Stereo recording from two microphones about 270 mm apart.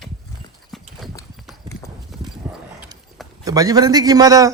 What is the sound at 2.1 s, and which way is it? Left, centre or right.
Clip-clop, centre.